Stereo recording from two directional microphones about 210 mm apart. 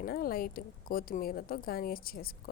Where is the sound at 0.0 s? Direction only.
45° left (ahead or behind).